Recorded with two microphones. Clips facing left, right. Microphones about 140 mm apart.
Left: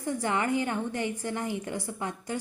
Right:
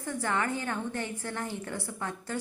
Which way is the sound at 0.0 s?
20° left (ahead or behind).